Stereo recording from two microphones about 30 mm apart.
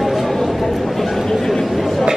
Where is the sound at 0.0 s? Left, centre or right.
Centre.